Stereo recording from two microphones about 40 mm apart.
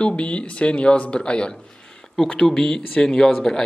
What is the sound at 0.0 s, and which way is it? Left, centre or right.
Speech, left.